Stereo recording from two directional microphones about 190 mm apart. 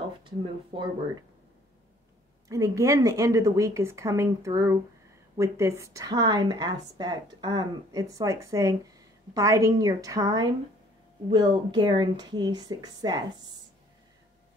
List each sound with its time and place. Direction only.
0.7 s speech: 25° right (ahead or behind)
2.4 s a woman's voice: 15° right (ahead or behind)